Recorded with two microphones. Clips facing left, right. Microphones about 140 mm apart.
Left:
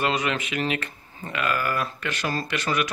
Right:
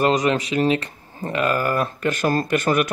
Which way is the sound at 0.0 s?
40° right (ahead or behind).